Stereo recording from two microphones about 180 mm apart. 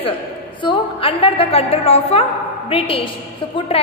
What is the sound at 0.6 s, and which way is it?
A woman's voice, 30° left (ahead or behind).